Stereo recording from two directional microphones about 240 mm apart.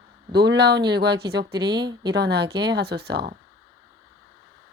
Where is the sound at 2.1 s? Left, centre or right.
Right.